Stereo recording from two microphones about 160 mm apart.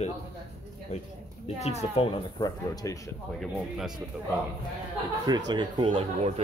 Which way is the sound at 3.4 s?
Centre (ahead or behind).